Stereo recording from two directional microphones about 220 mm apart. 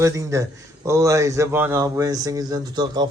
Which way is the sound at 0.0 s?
15° right (ahead or behind).